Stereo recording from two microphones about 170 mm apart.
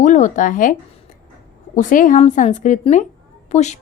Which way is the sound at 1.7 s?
50° left (ahead or behind).